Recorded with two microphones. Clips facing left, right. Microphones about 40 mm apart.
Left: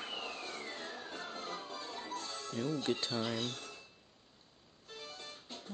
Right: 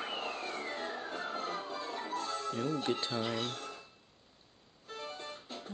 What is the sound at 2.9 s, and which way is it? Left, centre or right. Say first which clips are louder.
Speech: right 2 dB; right.